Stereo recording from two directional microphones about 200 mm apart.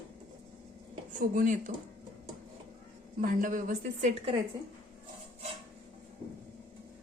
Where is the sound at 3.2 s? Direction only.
40° right (ahead or behind).